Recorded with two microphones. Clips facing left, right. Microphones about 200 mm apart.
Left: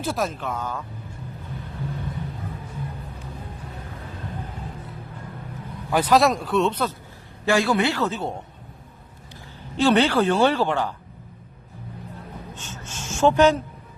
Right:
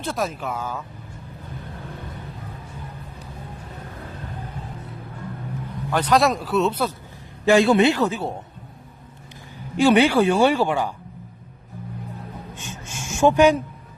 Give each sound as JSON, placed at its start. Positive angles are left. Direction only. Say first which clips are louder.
{"t": 0.0, "sound": "speech", "louder": "even", "side_deg": 0}
{"t": 5.9, "sound": "speech", "louder": "left 1 dB", "side_deg": 5}
{"t": 7.4, "sound": "speech", "louder": "right 5 dB", "side_deg": -20}
{"t": 9.7, "sound": "speech", "louder": "right 3 dB", "side_deg": -10}
{"t": 12.5, "sound": "speech", "louder": "right 2 dB", "side_deg": -15}